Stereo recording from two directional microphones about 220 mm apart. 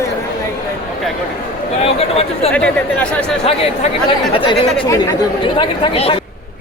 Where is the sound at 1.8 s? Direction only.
25° left (ahead or behind).